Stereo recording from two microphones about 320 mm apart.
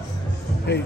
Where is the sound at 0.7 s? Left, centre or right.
Left.